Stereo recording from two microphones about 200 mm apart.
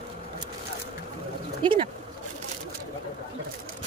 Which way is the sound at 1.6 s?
25° right (ahead or behind).